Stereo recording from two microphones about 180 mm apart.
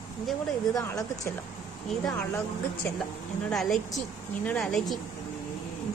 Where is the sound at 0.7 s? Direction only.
20° left (ahead or behind).